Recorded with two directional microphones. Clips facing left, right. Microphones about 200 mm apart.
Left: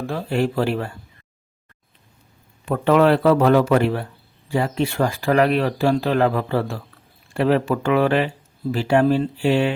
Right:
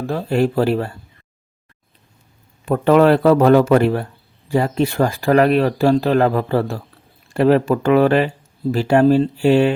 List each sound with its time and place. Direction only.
0.1 s speech: 40° right (ahead or behind)
2.6 s speech: 40° right (ahead or behind)